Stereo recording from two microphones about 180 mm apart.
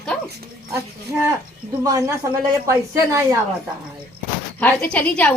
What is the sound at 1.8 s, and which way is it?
Speech, 20° right (ahead or behind).